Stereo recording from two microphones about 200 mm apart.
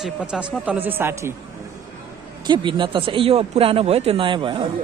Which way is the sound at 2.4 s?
25° right (ahead or behind).